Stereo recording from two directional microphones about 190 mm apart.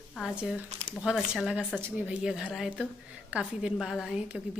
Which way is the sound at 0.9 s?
Centre (ahead or behind).